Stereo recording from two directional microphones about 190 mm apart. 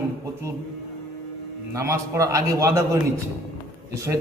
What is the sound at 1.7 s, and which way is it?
A man's voice, 15° right (ahead or behind).